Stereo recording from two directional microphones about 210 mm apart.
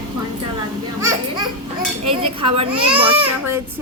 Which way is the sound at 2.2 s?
25° right (ahead or behind).